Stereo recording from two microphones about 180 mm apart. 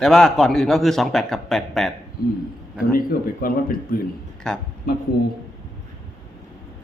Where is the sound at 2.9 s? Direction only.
55° left (ahead or behind).